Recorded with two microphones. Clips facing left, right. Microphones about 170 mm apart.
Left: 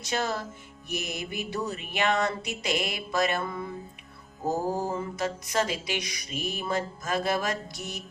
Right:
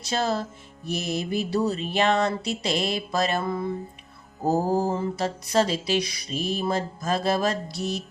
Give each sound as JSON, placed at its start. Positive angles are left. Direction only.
{"t": 0.0, "sound": "mantra", "side_deg": -30}